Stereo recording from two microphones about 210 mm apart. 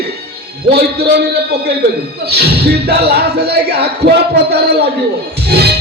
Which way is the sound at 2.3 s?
50° right (ahead or behind).